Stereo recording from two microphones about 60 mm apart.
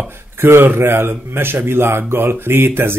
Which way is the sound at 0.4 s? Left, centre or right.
Right.